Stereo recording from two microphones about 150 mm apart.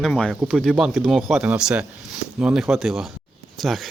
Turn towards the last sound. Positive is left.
turn(degrees=0)  # may be behind; listen again after turning